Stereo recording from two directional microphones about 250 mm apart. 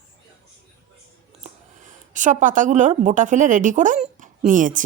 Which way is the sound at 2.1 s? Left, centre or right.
Right.